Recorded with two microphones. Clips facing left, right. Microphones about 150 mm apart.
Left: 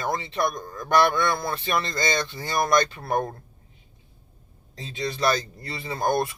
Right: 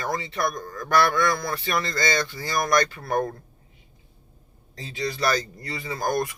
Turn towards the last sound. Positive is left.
turn(degrees=25)  # may be behind; listen again after turning